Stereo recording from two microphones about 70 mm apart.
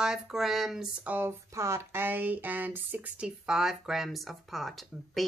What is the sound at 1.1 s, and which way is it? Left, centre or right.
Speech, right.